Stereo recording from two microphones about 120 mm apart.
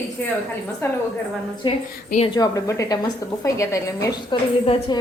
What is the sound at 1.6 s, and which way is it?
A woman's voice, 40° left (ahead or behind).